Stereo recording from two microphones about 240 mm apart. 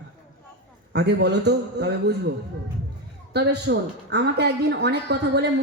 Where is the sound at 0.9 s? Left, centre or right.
Right.